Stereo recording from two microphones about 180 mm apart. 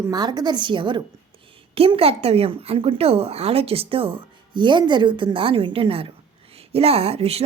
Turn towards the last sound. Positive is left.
turn(degrees=-35)  # may be behind; listen again after turning